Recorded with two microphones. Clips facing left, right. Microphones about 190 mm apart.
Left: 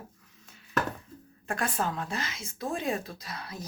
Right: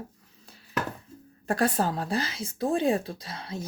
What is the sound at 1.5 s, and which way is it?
Speech, 35° right (ahead or behind).